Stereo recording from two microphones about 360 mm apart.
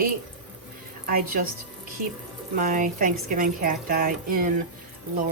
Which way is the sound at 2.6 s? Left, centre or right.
Right.